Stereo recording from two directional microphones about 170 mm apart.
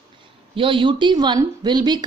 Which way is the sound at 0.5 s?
30° right (ahead or behind).